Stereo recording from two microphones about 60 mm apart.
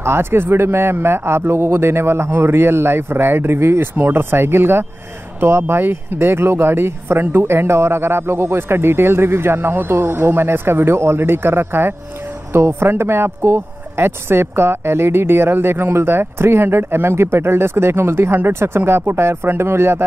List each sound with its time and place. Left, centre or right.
0.0 s speech: right